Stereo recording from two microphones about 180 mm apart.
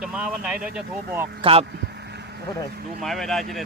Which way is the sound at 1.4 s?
30° right (ahead or behind).